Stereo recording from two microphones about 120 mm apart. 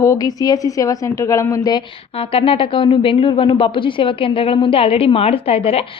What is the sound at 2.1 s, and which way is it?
Speech, 50° left (ahead or behind).